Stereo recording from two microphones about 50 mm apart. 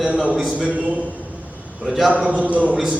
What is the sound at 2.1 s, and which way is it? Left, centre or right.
Speech, right.